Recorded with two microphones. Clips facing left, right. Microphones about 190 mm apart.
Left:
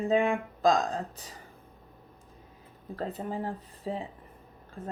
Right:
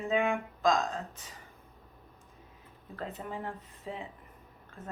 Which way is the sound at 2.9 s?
35° left (ahead or behind).